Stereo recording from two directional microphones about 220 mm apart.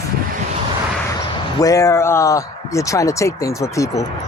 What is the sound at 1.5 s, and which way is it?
Speech, 15° left (ahead or behind).